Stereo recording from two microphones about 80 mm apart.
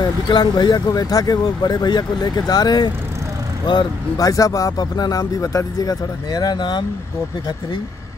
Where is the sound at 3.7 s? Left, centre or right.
Left.